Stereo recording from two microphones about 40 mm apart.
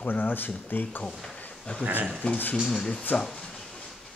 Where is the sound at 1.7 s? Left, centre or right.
Left.